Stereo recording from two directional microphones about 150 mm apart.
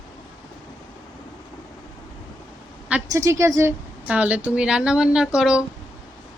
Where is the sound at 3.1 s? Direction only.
20° right (ahead or behind).